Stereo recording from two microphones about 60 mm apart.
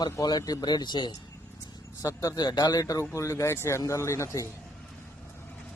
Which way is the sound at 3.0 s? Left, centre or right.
Left.